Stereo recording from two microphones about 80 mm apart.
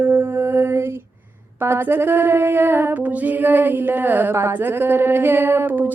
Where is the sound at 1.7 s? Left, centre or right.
Right.